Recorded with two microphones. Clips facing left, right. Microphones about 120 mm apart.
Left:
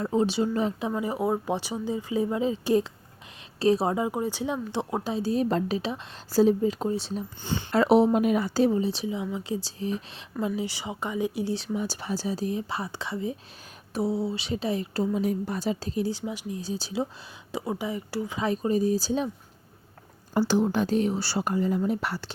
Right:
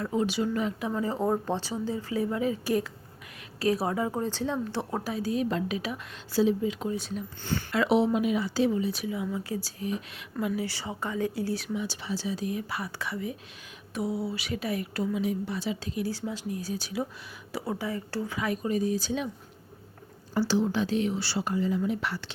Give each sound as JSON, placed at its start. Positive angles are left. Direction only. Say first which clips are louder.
{"t": 0.0, "sound": "a woman's voice", "louder": "left 3 dB", "side_deg": 25}
{"t": 0.9, "sound": "speech", "louder": "left 1 dB", "side_deg": 15}
{"t": 6.3, "sound": "a woman's voice", "louder": "left 4 dB", "side_deg": 40}
{"t": 11.7, "sound": "a woman's voice", "louder": "left 2 dB", "side_deg": 40}
{"t": 15.1, "sound": "speech", "louder": "left 2 dB", "side_deg": 45}
{"t": 16.1, "sound": "speech", "louder": "even", "side_deg": 15}
{"t": 16.6, "sound": "speech", "louder": "left 2 dB", "side_deg": 30}
{"t": 17.5, "sound": "speech", "louder": "left 2 dB", "side_deg": 15}
{"t": 20.5, "sound": "a woman's voice", "louder": "left 2 dB", "side_deg": 50}